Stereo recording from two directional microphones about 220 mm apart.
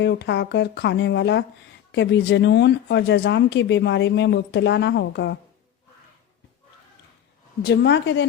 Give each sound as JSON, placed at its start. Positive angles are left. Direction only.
{"t": 0.0, "sound": "speech", "side_deg": 50}
{"t": 7.6, "sound": "speech", "side_deg": 50}